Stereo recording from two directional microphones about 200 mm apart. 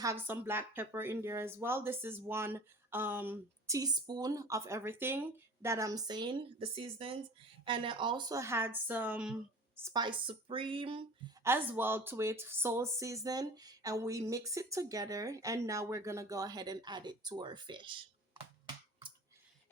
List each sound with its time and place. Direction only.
0.0 s speech: 10° right (ahead or behind)
9.9 s speech: 25° right (ahead or behind)
11.4 s speech: 10° right (ahead or behind)